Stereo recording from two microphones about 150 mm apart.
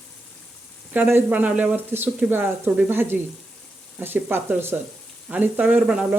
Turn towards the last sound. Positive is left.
turn(degrees=-5)  # may be behind; listen again after turning